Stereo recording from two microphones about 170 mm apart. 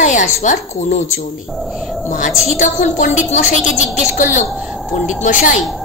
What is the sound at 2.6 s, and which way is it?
A woman's voice, 45° left (ahead or behind).